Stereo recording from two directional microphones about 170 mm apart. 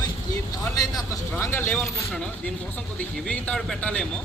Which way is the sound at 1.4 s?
15° left (ahead or behind).